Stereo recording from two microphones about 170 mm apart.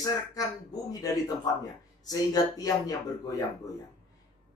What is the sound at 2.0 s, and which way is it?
Speech, 20° left (ahead or behind).